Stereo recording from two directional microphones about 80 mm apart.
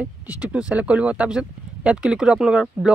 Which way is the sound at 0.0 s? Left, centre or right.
Centre.